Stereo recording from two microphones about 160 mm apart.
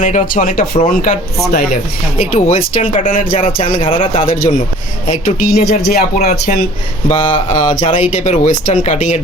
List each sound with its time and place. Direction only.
0.0 s speech: 50° left (ahead or behind)
3.3 s speech: 35° left (ahead or behind)
4.3 s speech: 60° left (ahead or behind)
7.1 s speech: 40° left (ahead or behind)
8.1 s speech: 45° left (ahead or behind)